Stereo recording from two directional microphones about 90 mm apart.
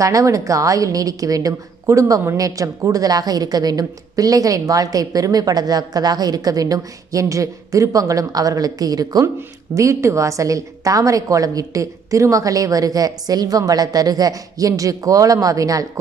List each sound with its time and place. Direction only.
0.0 s a woman's voice: 40° right (ahead or behind)